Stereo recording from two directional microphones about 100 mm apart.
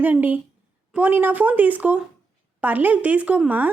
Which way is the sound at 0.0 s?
15° right (ahead or behind).